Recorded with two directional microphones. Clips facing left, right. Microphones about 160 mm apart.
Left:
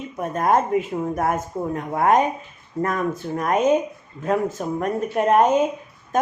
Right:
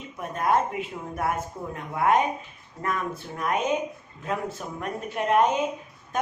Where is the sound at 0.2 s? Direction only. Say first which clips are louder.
Left 4 dB; 45° left (ahead or behind).